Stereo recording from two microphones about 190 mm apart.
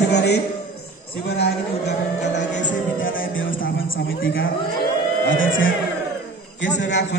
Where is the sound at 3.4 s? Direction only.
45° left (ahead or behind).